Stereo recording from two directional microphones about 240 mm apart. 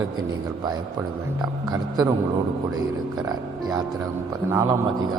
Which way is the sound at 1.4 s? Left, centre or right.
Centre.